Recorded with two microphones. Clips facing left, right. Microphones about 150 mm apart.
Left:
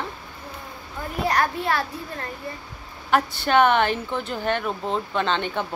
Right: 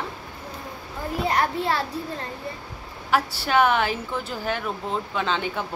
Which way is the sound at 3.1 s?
5° right (ahead or behind).